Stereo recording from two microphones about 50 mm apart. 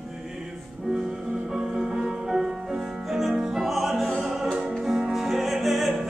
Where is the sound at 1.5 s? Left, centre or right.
Centre.